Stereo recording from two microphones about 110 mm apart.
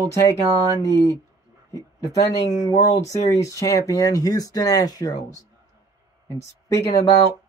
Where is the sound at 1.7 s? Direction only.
30° left (ahead or behind).